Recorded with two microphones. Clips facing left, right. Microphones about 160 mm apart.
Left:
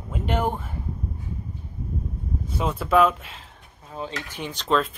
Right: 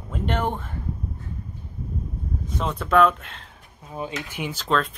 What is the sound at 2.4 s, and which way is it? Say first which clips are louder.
Speech: left 1 dB; 5° left (ahead or behind).